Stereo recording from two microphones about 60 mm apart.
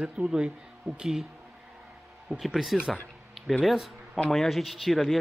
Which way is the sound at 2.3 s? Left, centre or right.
Centre.